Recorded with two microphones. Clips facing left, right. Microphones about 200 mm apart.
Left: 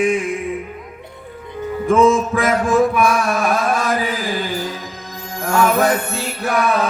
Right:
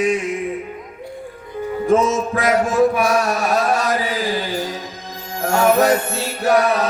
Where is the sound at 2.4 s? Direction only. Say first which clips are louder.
Even; 50° left (ahead or behind).